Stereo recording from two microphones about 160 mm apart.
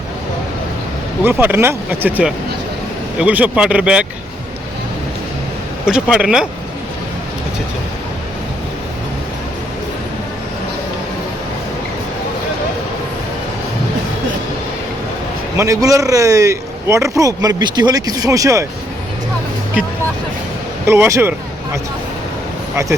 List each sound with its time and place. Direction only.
1.2 s speech: 10° right (ahead or behind)
5.8 s speech: 5° right (ahead or behind)
15.5 s a man's voice: 20° right (ahead or behind)
20.8 s speech: 15° right (ahead or behind)